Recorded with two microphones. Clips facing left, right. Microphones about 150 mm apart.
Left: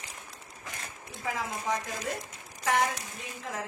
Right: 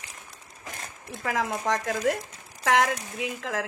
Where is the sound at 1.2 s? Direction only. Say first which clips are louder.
Right 6 dB; 75° right (ahead or behind).